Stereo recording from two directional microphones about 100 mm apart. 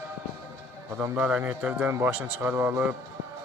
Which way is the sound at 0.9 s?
20° right (ahead or behind).